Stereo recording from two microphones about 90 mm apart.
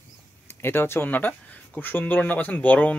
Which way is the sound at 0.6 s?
25° left (ahead or behind).